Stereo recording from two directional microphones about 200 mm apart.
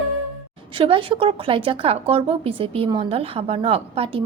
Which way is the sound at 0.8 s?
25° right (ahead or behind).